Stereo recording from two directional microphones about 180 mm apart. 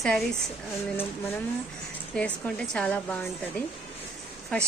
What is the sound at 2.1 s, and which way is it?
Speech, 5° left (ahead or behind).